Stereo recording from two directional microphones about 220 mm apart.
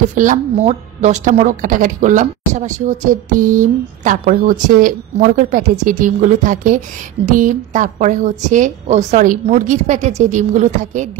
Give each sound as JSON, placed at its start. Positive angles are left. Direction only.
{"t": 0.1, "sound": "a woman's voice", "side_deg": -35}